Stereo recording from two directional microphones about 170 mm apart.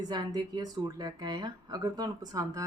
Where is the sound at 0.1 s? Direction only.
25° right (ahead or behind).